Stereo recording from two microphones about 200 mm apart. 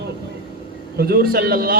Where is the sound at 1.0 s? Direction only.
50° right (ahead or behind).